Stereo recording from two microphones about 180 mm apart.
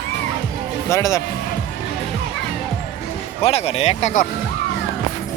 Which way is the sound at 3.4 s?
35° left (ahead or behind).